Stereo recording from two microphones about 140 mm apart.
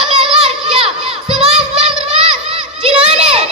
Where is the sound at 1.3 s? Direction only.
5° right (ahead or behind).